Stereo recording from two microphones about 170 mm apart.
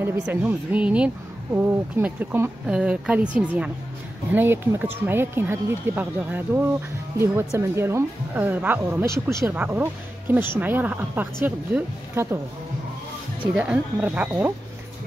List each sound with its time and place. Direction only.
0.0 s a woman's voice: 10° right (ahead or behind)
13.4 s a woman's voice: 5° right (ahead or behind)